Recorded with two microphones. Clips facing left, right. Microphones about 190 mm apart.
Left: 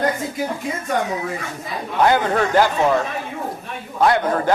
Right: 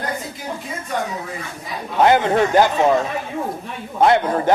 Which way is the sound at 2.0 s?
20° right (ahead or behind).